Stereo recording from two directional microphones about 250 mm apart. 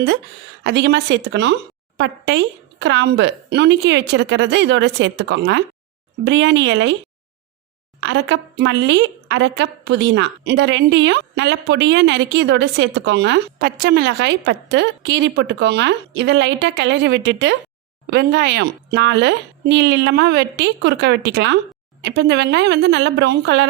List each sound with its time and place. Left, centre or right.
0.6 s a woman's voice: right
8.0 s a woman's voice: right